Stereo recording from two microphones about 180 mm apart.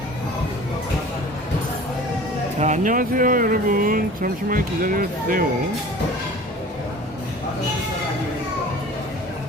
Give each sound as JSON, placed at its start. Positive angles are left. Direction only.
{"t": 2.6, "sound": "speech", "side_deg": -40}